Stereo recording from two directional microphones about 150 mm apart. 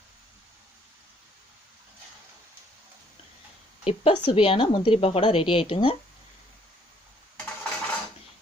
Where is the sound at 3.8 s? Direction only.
40° left (ahead or behind).